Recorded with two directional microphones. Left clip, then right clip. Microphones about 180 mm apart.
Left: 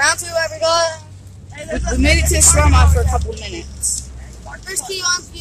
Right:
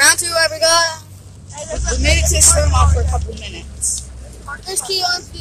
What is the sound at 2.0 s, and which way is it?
A woman's voice, 25° left (ahead or behind).